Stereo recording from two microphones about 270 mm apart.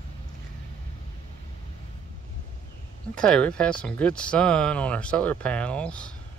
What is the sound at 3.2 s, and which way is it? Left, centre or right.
Speech, centre.